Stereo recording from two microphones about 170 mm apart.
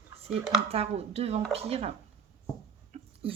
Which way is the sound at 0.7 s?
35° right (ahead or behind).